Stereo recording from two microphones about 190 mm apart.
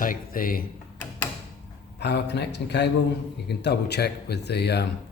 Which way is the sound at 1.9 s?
60° left (ahead or behind).